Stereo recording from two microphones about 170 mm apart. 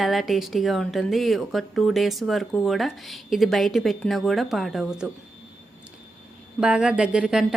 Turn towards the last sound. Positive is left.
turn(degrees=-5)  # may be behind; listen again after turning